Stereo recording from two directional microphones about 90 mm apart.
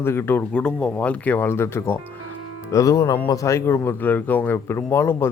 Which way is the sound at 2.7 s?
35° left (ahead or behind).